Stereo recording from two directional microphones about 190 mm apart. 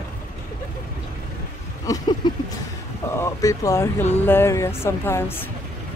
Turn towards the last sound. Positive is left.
turn(degrees=10)  # may be behind; listen again after turning